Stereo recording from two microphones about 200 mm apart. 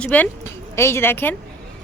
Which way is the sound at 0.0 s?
5° left (ahead or behind).